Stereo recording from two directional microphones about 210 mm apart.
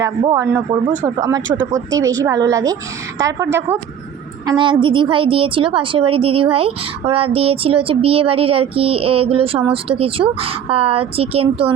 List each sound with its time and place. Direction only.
0.0 s a woman's voice: 15° right (ahead or behind)